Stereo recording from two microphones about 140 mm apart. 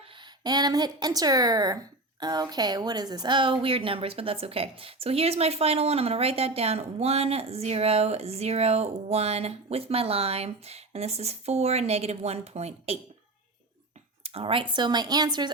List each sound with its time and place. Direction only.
0.4 s a woman's voice: 30° right (ahead or behind); by 13.0 s 50° right (ahead or behind)
14.3 s speech: 45° right (ahead or behind)